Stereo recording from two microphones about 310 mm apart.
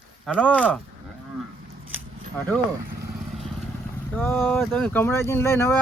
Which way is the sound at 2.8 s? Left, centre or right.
Right.